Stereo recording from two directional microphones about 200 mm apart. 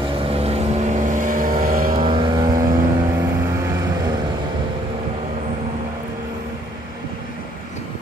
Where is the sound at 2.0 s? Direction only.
25° right (ahead or behind).